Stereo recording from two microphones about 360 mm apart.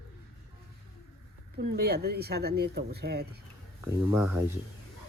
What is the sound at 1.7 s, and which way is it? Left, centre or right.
Speech, right.